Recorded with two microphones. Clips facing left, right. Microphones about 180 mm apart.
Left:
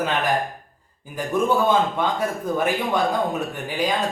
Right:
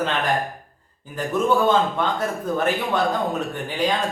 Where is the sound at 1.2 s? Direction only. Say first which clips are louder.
Even; 10° left (ahead or behind).